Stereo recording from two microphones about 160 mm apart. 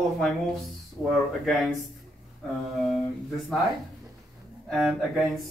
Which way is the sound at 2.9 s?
Centre (ahead or behind).